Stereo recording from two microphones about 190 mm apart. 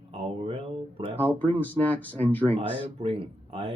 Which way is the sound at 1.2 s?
10° left (ahead or behind).